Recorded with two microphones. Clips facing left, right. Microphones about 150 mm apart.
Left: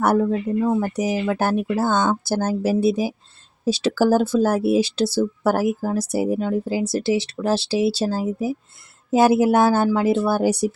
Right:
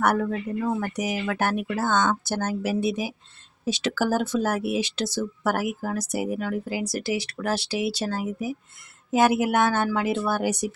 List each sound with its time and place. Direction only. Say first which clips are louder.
0.0 s speech: left 5 dB; 30° left (ahead or behind)